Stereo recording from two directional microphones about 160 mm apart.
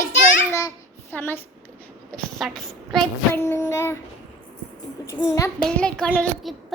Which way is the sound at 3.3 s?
15° left (ahead or behind).